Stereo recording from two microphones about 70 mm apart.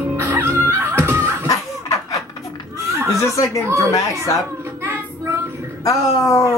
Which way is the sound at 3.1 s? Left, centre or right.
Left.